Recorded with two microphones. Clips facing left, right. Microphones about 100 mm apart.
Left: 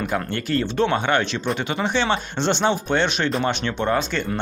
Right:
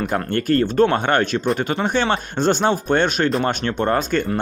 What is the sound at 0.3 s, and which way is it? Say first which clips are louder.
Speech: right 5 dB; 45° right (ahead or behind).